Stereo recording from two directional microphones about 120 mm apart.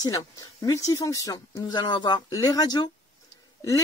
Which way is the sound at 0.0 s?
30° left (ahead or behind).